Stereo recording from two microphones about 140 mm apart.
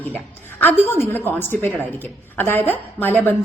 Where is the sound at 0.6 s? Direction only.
15° left (ahead or behind).